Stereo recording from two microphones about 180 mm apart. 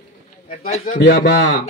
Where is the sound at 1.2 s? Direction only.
75° left (ahead or behind).